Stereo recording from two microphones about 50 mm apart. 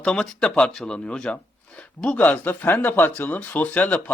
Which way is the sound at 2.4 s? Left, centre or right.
Left.